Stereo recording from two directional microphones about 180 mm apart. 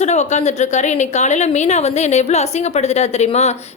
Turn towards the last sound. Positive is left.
turn(degrees=35)  # may be behind; listen again after turning